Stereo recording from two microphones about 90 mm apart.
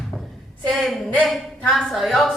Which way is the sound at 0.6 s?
Centre (ahead or behind).